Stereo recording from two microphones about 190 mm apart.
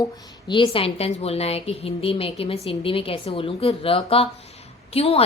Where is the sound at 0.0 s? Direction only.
25° left (ahead or behind).